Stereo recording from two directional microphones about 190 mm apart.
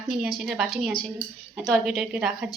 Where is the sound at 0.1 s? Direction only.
Centre (ahead or behind).